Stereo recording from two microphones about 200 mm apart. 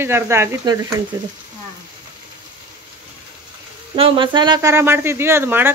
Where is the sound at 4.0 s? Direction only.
25° right (ahead or behind).